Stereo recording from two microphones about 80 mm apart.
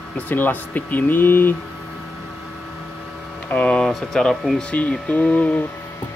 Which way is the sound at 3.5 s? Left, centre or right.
Centre.